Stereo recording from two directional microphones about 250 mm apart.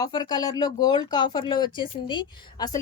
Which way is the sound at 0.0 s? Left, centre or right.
Centre.